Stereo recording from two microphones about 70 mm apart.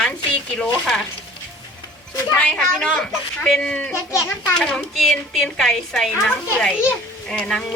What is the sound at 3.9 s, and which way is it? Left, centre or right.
Speech, left.